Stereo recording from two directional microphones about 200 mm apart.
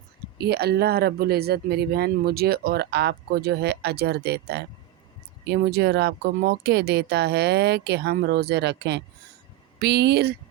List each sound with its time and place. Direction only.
0.3 s speech: 55° right (ahead or behind)